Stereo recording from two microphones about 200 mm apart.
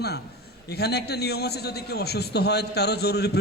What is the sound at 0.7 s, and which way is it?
A man's voice, 55° left (ahead or behind).